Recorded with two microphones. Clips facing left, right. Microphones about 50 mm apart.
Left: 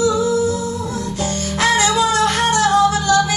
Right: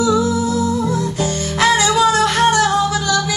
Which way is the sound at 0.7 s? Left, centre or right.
Right.